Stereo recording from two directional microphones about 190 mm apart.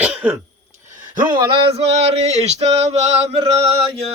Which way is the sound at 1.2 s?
25° right (ahead or behind).